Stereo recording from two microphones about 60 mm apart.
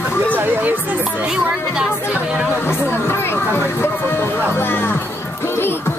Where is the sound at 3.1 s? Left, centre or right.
Left.